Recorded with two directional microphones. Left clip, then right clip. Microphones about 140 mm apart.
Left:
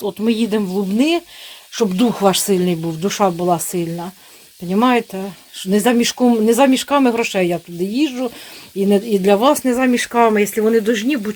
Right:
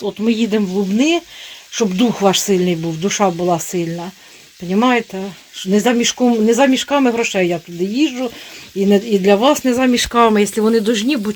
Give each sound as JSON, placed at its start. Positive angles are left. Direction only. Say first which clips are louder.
{"t": 0.0, "sound": "speech", "louder": "right 1 dB", "side_deg": 0}
{"t": 9.8, "sound": "speech", "louder": "right 2 dB", "side_deg": -25}
{"t": 10.5, "sound": "speech", "louder": "even", "side_deg": 0}
{"t": 10.8, "sound": "speech", "louder": "right 1 dB", "side_deg": -20}